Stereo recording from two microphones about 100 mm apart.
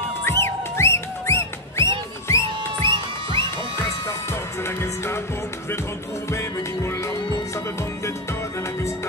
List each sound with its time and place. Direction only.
0.3 s music: 25° left (ahead or behind)
2.8 s music: 55° right (ahead or behind)
4.3 s music: 25° left (ahead or behind)
6.3 s music: 30° left (ahead or behind)